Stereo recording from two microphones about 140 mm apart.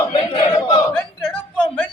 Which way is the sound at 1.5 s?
10° left (ahead or behind).